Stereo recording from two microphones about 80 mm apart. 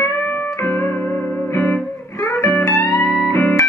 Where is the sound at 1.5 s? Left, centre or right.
Left.